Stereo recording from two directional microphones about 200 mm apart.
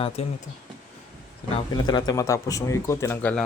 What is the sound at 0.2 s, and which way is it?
Speech, 30° left (ahead or behind).